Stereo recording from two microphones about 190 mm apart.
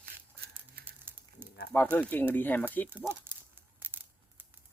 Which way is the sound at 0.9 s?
10° right (ahead or behind).